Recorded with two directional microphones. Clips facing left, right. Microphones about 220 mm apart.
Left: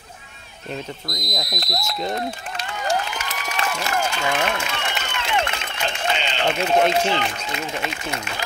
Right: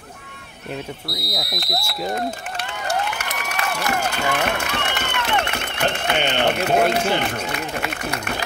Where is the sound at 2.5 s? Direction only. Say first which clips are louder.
Left 1 dB; 65° right (ahead or behind).